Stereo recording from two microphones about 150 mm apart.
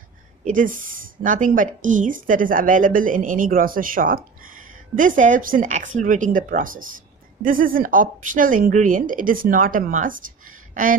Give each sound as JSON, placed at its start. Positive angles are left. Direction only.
{"t": 0.4, "sound": "a woman's voice", "side_deg": -60}